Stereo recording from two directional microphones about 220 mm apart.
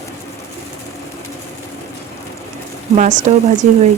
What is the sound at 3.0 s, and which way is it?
Speech, 35° right (ahead or behind).